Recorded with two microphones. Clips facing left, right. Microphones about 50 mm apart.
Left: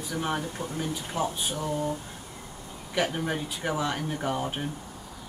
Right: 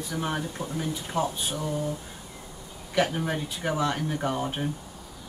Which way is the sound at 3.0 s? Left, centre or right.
Centre.